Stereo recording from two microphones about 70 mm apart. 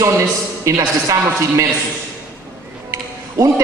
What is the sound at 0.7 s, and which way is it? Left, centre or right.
Speech, right.